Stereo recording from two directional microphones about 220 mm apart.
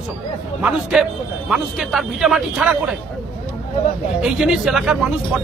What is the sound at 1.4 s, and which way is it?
Speech, centre (ahead or behind).